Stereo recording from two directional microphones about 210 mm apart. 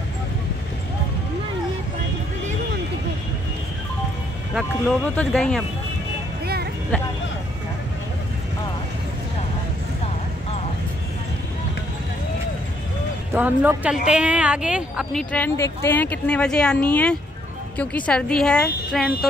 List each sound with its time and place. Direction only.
4.6 s speech: 5° left (ahead or behind)
6.4 s music: 50° right (ahead or behind)
13.3 s speech: 10° right (ahead or behind)
15.3 s speech: 10° left (ahead or behind)